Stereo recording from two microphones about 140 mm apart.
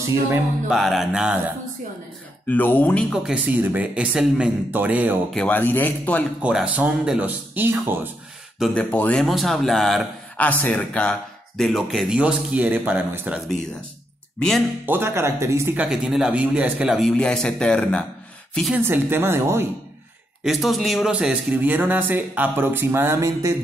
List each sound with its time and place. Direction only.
0.7 s speech: centre (ahead or behind)
2.4 s a man's voice: 10° left (ahead or behind)
3.1 s speech: 10° right (ahead or behind)
5.3 s a man's voice: 10° left (ahead or behind)
6.4 s speech: 10° right (ahead or behind)
8.7 s a man's voice: 10° left (ahead or behind); by 13.4 s 10° right (ahead or behind)
14.9 s speech: 15° right (ahead or behind); by 18.0 s 5° left (ahead or behind)
18.8 s speech: 15° right (ahead or behind)
20.4 s speech: centre (ahead or behind); by 23.5 s 20° right (ahead or behind)